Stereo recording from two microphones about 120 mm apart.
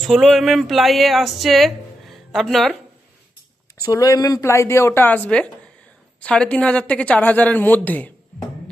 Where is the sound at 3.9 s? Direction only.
30° left (ahead or behind).